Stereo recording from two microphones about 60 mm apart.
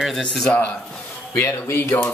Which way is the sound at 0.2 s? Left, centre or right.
Centre.